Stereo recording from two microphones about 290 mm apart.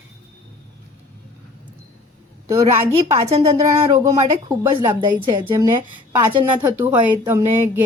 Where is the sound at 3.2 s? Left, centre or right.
Right.